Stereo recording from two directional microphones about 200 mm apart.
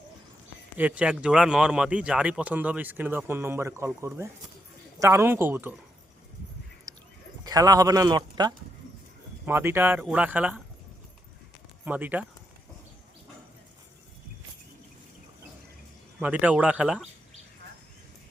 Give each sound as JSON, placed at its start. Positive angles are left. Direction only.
{"t": 0.8, "sound": "speech", "side_deg": -5}
{"t": 6.9, "sound": "a sound", "side_deg": -15}
{"t": 7.4, "sound": "speech", "side_deg": -20}
{"t": 9.5, "sound": "speech", "side_deg": -10}
{"t": 11.9, "sound": "speech", "side_deg": -10}
{"t": 16.2, "sound": "speech", "side_deg": -5}